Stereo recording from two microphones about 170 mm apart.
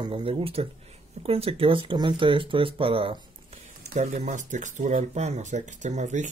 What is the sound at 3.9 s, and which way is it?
Speech, 45° right (ahead or behind).